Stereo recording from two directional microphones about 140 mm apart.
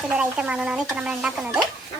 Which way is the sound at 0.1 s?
10° right (ahead or behind).